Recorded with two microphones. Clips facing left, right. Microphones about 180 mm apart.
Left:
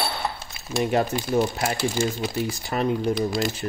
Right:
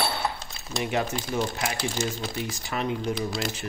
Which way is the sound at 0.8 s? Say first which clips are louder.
Left 5 dB; 35° left (ahead or behind).